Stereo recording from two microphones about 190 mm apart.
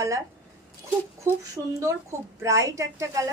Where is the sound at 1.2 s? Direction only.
15° right (ahead or behind).